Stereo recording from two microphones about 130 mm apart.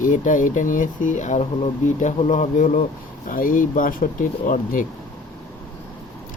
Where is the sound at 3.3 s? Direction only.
90° left.